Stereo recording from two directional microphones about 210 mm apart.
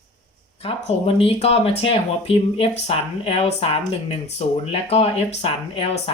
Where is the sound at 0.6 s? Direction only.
25° left (ahead or behind).